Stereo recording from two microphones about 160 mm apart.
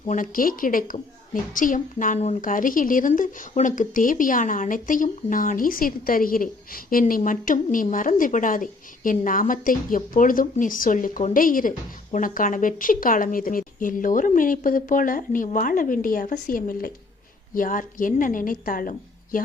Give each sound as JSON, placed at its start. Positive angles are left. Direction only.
{"t": 0.2, "sound": "a woman's voice", "side_deg": 60}
{"t": 2.5, "sound": "a woman's voice", "side_deg": 60}
{"t": 7.0, "sound": "a woman's voice", "side_deg": 50}